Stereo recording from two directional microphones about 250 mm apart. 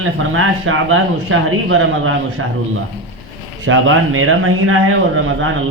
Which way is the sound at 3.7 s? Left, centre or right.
Right.